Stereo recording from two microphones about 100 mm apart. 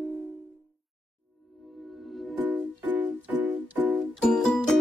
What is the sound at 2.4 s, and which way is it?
Music, 15° right (ahead or behind).